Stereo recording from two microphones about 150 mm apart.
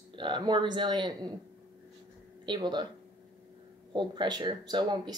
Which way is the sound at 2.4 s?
30° right (ahead or behind).